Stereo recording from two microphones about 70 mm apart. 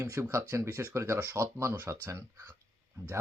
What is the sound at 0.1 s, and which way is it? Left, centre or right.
Speech, right.